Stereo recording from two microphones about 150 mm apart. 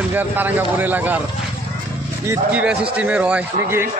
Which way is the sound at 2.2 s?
20° right (ahead or behind).